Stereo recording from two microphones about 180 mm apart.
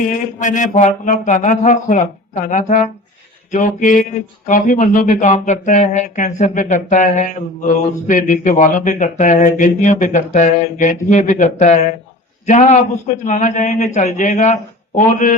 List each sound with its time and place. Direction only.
0.0 s a man's voice: 45° left (ahead or behind)